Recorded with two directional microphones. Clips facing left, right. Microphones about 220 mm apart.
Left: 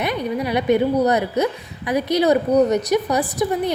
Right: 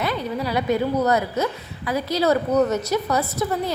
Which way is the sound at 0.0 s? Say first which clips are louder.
Left 3 dB; 15° left (ahead or behind).